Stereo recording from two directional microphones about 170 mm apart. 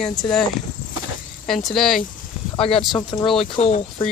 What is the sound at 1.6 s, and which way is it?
Speech, centre (ahead or behind).